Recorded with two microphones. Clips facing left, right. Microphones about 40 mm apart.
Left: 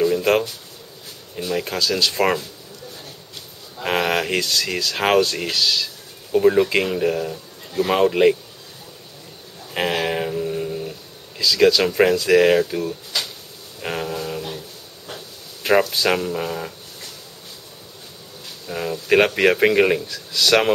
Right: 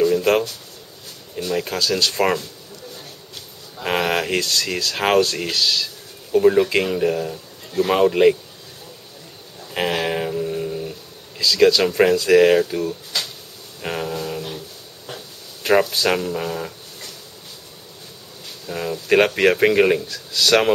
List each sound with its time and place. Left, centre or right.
0.0 s a sound: centre
1.3 s speech: centre
3.7 s speech: centre
9.7 s speech: centre
13.7 s a sound: centre
18.7 s speech: centre